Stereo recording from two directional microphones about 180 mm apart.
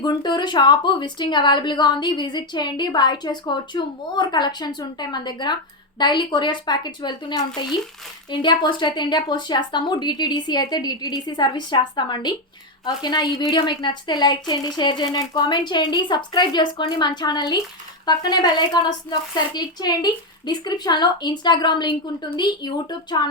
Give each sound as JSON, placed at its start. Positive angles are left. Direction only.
{"t": 0.0, "sound": "speech", "side_deg": 25}